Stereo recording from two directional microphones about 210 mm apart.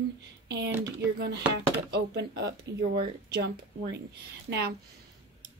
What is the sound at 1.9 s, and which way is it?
Speech, 55° right (ahead or behind).